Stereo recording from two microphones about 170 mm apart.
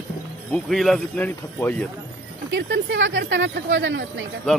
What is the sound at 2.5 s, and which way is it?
Speech, 90° right.